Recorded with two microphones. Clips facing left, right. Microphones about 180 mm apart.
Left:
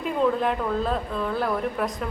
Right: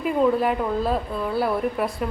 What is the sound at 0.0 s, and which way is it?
A woman's voice, 5° right (ahead or behind).